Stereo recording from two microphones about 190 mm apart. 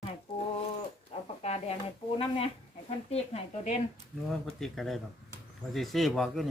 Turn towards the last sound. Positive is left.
turn(degrees=0)  # may be behind; listen again after turning